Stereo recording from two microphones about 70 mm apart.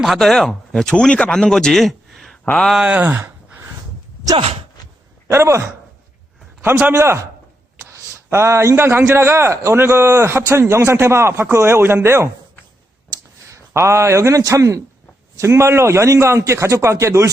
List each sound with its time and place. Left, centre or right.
0.0 s speech: centre
3.0 s a sound: right
5.3 s a man's voice: right
6.9 s a man's voice: right
8.3 s a man's voice: right
13.5 s a man's voice: right